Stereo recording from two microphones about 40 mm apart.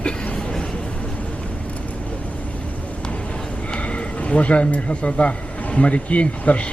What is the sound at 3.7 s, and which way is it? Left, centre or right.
A man's voice, left.